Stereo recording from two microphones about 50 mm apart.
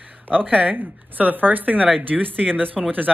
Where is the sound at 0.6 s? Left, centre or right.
Right.